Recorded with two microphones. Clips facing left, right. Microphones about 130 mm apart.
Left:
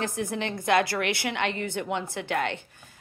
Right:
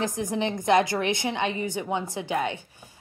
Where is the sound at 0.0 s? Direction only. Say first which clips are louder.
Right 3 dB; 15° right (ahead or behind).